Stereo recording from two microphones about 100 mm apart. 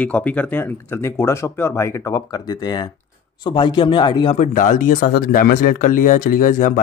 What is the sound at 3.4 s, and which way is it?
Speech, 55° left (ahead or behind).